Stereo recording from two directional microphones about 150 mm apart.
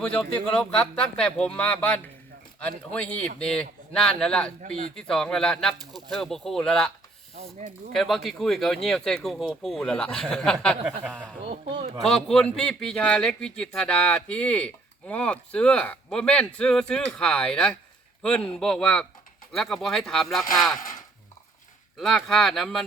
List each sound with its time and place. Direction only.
0.0 s speech: 5° left (ahead or behind)
7.9 s speech: centre (ahead or behind)
11.4 s speech: 40° right (ahead or behind)
12.0 s speech: 5° left (ahead or behind)
21.9 s speech: centre (ahead or behind)